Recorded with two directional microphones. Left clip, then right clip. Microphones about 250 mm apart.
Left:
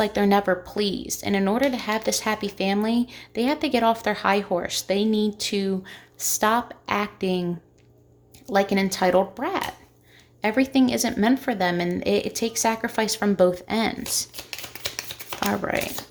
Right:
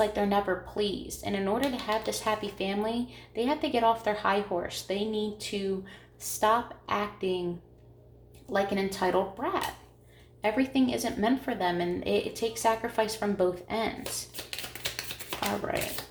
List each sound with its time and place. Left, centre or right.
0.0 s a woman's voice: left
8.5 s a woman's voice: left
15.4 s a woman's voice: left